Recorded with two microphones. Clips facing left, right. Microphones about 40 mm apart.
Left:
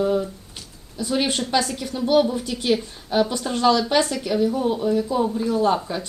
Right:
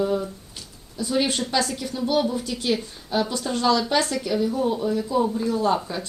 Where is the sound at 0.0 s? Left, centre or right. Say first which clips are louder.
Left 2 dB; centre.